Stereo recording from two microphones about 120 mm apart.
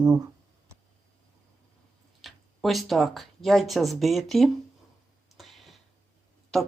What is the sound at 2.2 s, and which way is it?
Speech, centre (ahead or behind).